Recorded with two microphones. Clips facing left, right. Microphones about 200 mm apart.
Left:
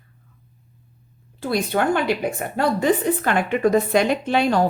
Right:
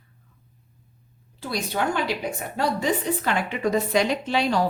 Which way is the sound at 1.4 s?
55° left (ahead or behind).